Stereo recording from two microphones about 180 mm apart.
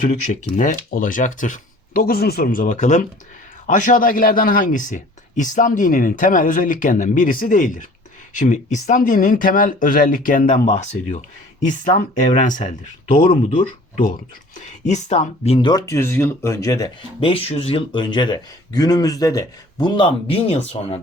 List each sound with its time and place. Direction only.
0.0 s a man's voice: 40° left (ahead or behind)
13.2 s speech: 30° left (ahead or behind)
14.8 s speech: 40° left (ahead or behind); by 16.9 s 20° left (ahead or behind)
17.2 s speech: 30° left (ahead or behind)